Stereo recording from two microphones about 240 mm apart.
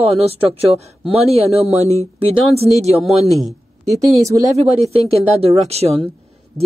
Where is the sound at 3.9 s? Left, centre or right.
Centre.